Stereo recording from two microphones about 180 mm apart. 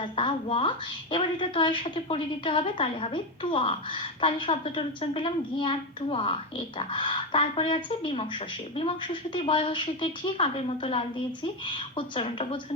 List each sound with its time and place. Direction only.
0.0 s a woman's voice: 30° left (ahead or behind)